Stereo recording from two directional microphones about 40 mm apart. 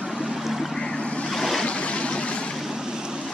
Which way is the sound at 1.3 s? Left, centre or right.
Centre.